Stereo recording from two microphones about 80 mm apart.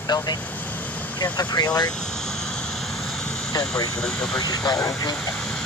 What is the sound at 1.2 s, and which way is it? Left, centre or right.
Speech, left.